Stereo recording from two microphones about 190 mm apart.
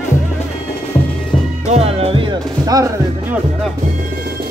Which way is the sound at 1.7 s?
30° right (ahead or behind).